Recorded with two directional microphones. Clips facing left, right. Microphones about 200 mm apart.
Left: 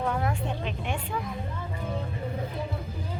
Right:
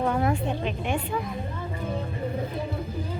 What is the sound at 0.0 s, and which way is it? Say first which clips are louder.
Speech: right 4 dB; 20° right (ahead or behind).